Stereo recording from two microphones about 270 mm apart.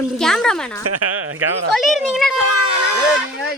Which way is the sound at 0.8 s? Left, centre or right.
Right.